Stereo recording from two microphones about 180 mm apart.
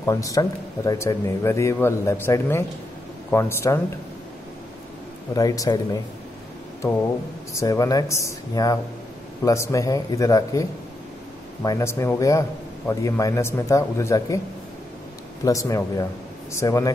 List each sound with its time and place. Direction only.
0.0 s a man's voice: 20° left (ahead or behind)
5.3 s speech: 20° left (ahead or behind)
7.5 s a man's voice: 20° left (ahead or behind)
15.4 s a man's voice: 15° left (ahead or behind)